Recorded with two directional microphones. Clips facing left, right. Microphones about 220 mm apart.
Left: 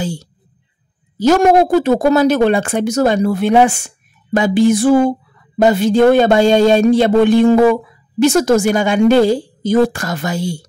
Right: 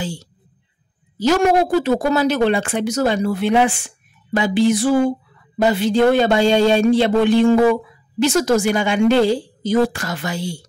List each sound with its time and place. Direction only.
1.1 s speech: 45° left (ahead or behind)